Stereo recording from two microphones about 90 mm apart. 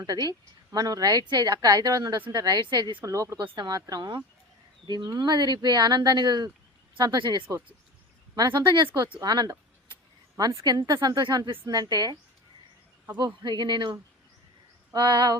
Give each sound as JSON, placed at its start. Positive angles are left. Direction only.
{"t": 0.0, "sound": "a woman's voice", "side_deg": -50}
{"t": 3.0, "sound": "speech", "side_deg": -35}
{"t": 3.3, "sound": "a woman's voice", "side_deg": -60}
{"t": 9.2, "sound": "a woman's voice", "side_deg": -50}
{"t": 13.1, "sound": "speech", "side_deg": -55}
{"t": 14.9, "sound": "a woman's voice", "side_deg": -50}